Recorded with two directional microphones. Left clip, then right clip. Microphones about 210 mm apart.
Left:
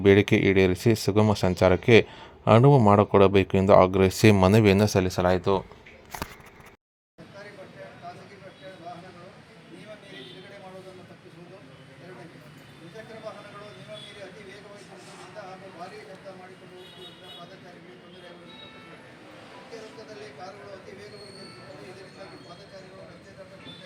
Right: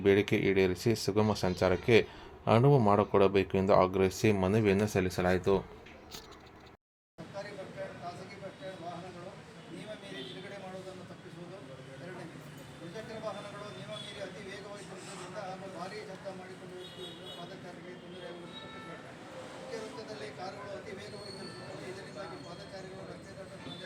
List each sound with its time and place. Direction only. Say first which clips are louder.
0.0 s speech: left 8 dB; 40° left (ahead or behind)